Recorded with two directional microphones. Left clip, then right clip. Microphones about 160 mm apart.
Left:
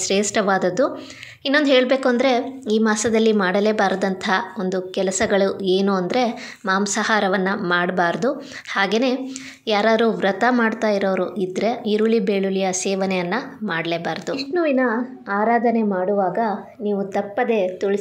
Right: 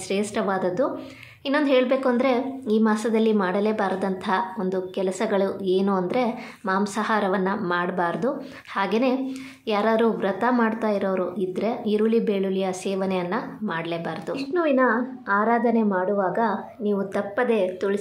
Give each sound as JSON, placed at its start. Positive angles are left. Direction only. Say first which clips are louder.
{"t": 0.0, "sound": "a woman's voice", "louder": "left 6 dB", "side_deg": 20}